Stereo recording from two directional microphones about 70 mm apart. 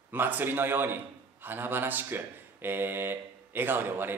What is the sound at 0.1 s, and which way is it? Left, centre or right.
A man's voice, right.